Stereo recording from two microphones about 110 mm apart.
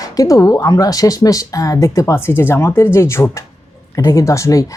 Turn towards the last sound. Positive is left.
turn(degrees=30)  # may be behind; listen again after turning